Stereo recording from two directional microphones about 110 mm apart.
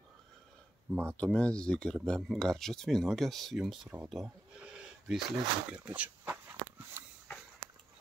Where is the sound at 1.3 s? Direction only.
10° left (ahead or behind).